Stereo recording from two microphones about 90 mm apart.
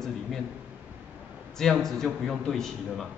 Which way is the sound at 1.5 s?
5° left (ahead or behind).